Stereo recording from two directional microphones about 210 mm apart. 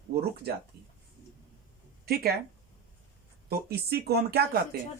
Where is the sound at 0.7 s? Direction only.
45° right (ahead or behind).